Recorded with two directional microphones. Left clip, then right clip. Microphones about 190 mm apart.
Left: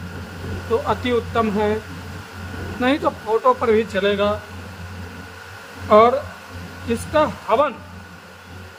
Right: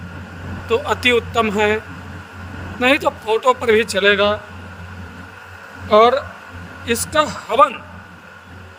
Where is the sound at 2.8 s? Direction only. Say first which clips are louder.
Right 4 dB; 40° right (ahead or behind).